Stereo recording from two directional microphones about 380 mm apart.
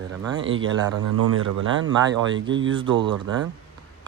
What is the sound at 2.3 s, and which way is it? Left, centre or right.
Speech, right.